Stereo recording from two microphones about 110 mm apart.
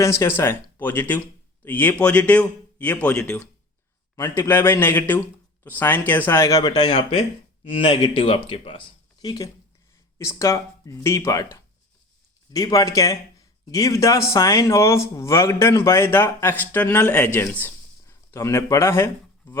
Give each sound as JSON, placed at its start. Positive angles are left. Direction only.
{"t": 0.0, "sound": "a man's voice", "side_deg": 25}
{"t": 4.1, "sound": "a man's voice", "side_deg": 20}
{"t": 6.4, "sound": "speech", "side_deg": 35}
{"t": 9.2, "sound": "speech", "side_deg": 35}
{"t": 12.5, "sound": "speech", "side_deg": 35}
{"t": 17.5, "sound": "a sound", "side_deg": 20}